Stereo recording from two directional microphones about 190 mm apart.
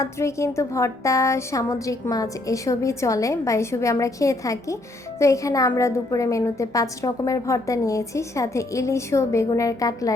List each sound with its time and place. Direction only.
0.0 s a woman's voice: 15° left (ahead or behind)